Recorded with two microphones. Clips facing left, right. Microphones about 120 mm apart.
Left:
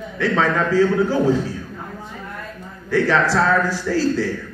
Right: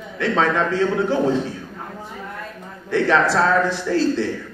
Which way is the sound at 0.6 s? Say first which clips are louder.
Left 3 dB; 25° right (ahead or behind).